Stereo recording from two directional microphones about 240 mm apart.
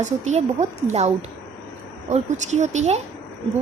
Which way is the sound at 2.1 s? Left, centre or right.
Right.